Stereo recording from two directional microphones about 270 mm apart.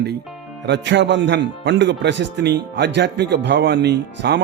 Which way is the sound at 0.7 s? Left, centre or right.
Right.